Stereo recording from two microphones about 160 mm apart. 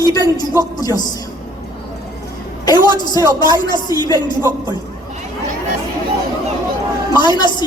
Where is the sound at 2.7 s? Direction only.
25° left (ahead or behind).